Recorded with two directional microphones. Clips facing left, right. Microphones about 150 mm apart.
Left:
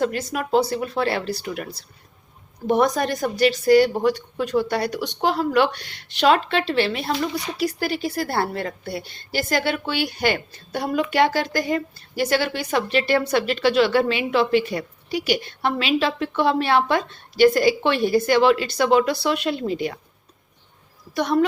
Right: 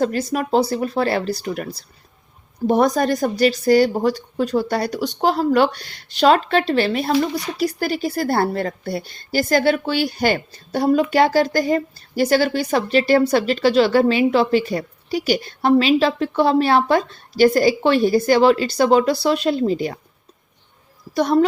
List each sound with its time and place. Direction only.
0.0 s a woman's voice: 35° right (ahead or behind)
2.6 s a woman's voice: 35° right (ahead or behind)
21.1 s speech: 35° right (ahead or behind)